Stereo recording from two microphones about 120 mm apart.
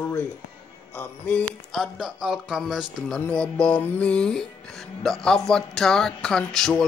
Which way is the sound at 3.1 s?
10° left (ahead or behind).